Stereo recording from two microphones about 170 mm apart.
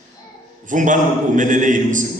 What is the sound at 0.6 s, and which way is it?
A man's voice, 50° right (ahead or behind).